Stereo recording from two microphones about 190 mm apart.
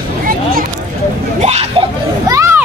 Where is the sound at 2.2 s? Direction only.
15° right (ahead or behind).